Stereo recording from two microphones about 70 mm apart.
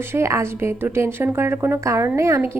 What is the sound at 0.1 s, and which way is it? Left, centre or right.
A woman's voice, right.